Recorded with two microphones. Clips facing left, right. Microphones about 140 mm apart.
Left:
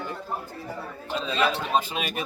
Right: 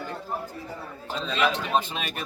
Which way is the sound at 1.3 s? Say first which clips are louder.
Even; 5° left (ahead or behind).